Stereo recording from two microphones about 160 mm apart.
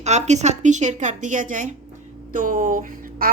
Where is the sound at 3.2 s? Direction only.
65° right (ahead or behind).